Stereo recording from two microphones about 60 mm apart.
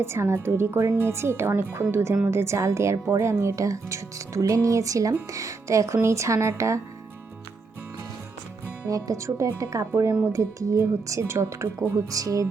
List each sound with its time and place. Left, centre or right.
0.0 s speech: right
8.9 s speech: right